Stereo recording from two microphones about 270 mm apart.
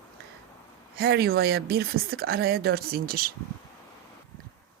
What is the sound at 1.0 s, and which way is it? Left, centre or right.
A woman's voice, right.